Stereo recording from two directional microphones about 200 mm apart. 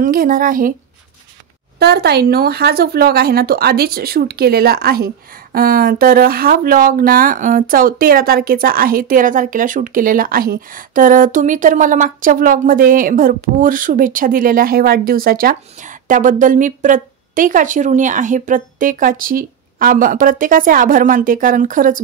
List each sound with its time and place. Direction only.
0.0 s speech: 45° right (ahead or behind)
1.8 s speech: 55° right (ahead or behind)